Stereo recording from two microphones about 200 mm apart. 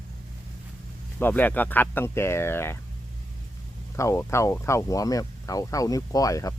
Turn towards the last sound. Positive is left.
turn(degrees=15)  # may be behind; listen again after turning